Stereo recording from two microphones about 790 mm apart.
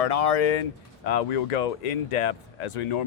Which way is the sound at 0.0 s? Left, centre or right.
Left.